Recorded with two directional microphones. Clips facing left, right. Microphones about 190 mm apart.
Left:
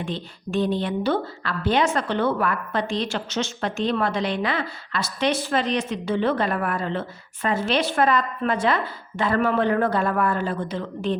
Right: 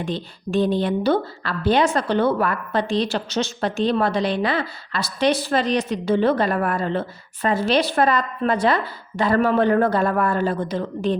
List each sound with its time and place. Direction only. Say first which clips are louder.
0.0 s a woman's voice: right 3 dB; 35° right (ahead or behind)